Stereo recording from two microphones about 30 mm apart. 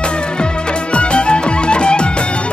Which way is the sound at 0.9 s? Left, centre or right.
Left.